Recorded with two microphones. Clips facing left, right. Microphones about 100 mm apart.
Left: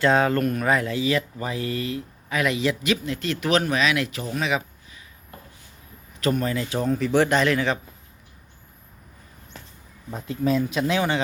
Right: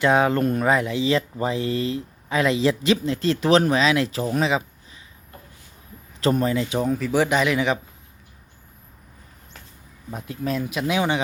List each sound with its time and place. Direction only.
0.0 s speech: 15° right (ahead or behind)
6.1 s speech: 30° right (ahead or behind); by 7.8 s 15° right (ahead or behind)
10.1 s speech: 5° right (ahead or behind)